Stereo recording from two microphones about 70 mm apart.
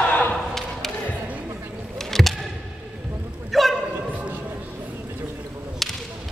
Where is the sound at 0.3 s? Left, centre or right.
Centre.